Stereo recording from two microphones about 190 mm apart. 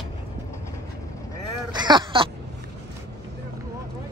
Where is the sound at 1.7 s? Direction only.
25° right (ahead or behind).